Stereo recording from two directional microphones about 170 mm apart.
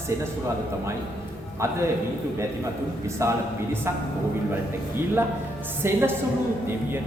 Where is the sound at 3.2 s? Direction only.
15° right (ahead or behind).